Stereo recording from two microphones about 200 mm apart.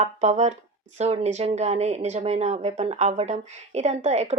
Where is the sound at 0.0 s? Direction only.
35° right (ahead or behind).